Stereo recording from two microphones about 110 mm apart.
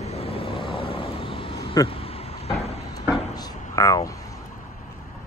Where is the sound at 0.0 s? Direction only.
70° left (ahead or behind).